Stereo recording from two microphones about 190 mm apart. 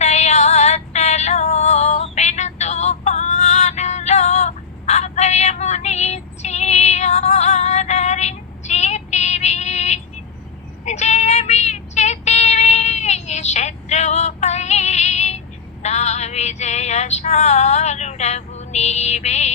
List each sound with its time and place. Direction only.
0.0 s female singing: 35° left (ahead or behind)
10.8 s child singing: 35° left (ahead or behind)
15.8 s female singing: 35° left (ahead or behind)